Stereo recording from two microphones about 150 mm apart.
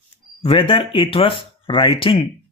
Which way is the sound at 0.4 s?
35° left (ahead or behind).